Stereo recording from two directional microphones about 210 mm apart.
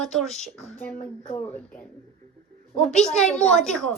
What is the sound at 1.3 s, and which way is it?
Speech, 10° left (ahead or behind).